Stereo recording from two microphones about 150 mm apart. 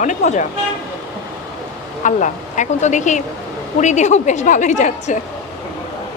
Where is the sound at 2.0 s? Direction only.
55° left (ahead or behind).